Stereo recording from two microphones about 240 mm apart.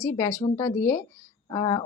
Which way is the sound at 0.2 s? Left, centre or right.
Centre.